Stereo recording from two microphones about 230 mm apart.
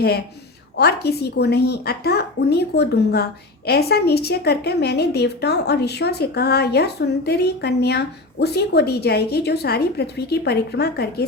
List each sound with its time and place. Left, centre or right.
0.8 s a woman's voice: left